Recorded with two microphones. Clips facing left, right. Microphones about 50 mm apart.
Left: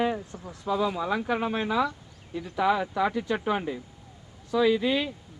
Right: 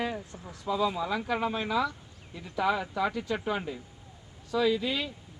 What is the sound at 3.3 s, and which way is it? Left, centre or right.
Speech, left.